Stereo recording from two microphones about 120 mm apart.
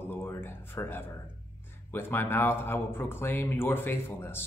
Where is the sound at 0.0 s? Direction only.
20° left (ahead or behind).